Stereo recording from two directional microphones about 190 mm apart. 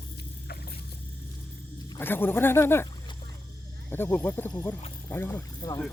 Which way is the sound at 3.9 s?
10° left (ahead or behind).